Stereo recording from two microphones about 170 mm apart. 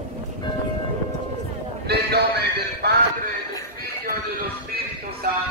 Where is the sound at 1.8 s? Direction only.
70° right (ahead or behind).